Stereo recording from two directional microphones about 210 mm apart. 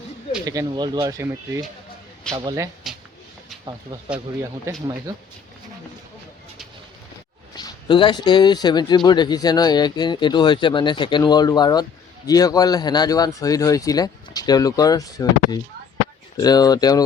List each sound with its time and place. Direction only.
0.4 s speech: 20° right (ahead or behind)
2.8 s a sound: centre (ahead or behind)
4.7 s speech: 15° right (ahead or behind)
7.5 s speech: 20° left (ahead or behind)